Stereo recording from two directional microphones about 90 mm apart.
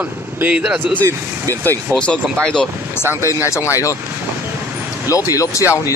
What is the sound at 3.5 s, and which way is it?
Speech, 35° left (ahead or behind).